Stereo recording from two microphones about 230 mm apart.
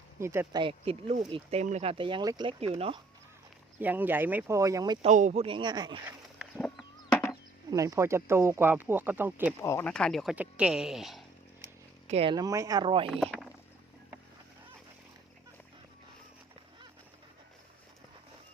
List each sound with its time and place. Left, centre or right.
0.2 s speech: centre
3.8 s speech: centre
5.0 s speech: right
7.1 s a sound: centre
7.7 s speech: centre
9.6 s speech: centre
12.0 s speech: right
13.1 s speech: centre